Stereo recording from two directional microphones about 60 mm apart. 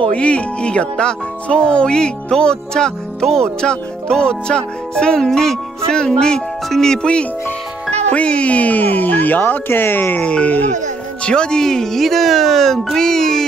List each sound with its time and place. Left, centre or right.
0.1 s speech: centre
10.2 s speech: left
11.2 s speech: centre